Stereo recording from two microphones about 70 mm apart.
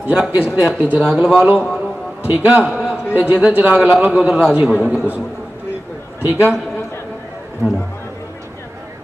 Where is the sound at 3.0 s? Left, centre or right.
Left.